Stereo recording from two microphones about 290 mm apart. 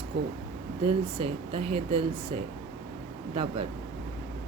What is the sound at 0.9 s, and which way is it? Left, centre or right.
Speech, centre.